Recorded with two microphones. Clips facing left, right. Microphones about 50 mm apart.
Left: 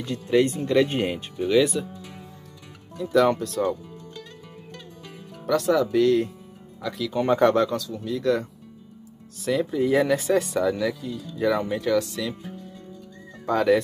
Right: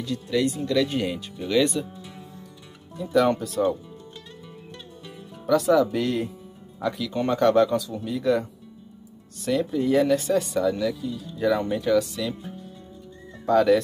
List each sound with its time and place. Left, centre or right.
0.0 s speech: left
1.5 s speech: centre
3.0 s speech: centre
5.5 s speech: centre
7.1 s speech: centre
7.7 s speech: centre
13.5 s speech: centre